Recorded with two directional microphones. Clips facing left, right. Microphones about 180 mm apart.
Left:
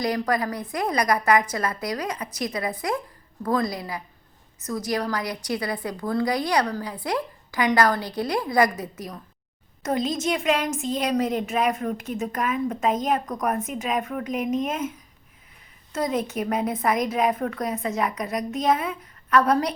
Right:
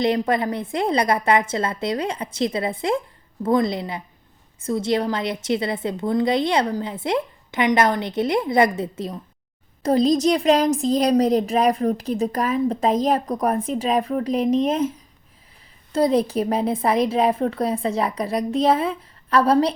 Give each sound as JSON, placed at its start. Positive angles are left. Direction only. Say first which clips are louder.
{"t": 0.0, "sound": "a woman's voice", "louder": "right 4 dB", "side_deg": -25}